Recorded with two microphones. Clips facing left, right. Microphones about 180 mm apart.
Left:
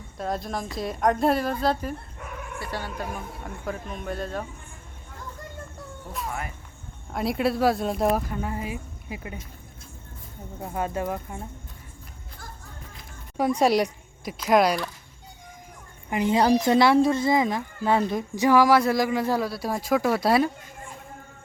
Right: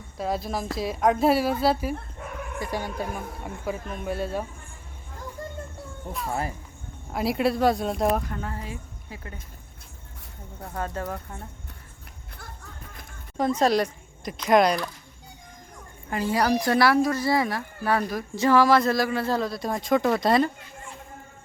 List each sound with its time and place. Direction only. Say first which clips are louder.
0.2 s a woman's voice: right 1 dB; 5° right (ahead or behind)
7.1 s a woman's voice: right 1 dB; centre (ahead or behind)
8.4 s speech: left 4 dB; 15° left (ahead or behind)
10.6 s speech: left 3 dB; 10° left (ahead or behind)
13.3 s speech: left 1 dB; 10° left (ahead or behind)
16.0 s speech: left 3 dB; 20° left (ahead or behind)